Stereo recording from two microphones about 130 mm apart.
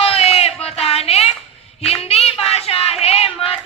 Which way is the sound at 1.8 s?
50° left (ahead or behind).